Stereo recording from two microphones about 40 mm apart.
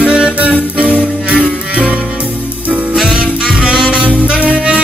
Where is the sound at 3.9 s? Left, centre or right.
Right.